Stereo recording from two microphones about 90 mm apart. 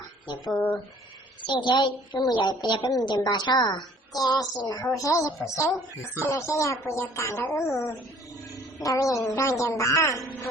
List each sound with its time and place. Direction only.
0.3 s a woman's voice: 50° left (ahead or behind)